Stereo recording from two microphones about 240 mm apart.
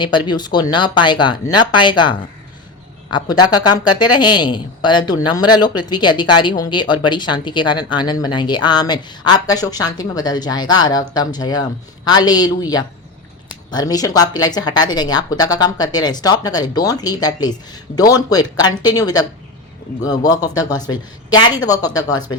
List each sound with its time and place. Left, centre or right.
0.0 s speech: centre